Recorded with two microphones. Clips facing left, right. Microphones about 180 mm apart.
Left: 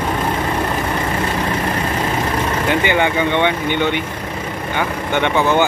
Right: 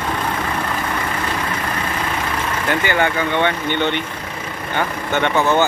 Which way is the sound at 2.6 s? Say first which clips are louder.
Left 1 dB; 15° left (ahead or behind).